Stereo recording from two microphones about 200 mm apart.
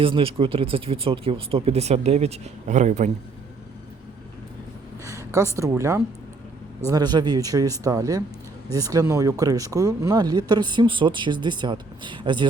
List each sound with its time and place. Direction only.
0.0 s speech: 25° right (ahead or behind)
5.0 s a sound: 15° right (ahead or behind)
5.5 s speech: 15° right (ahead or behind)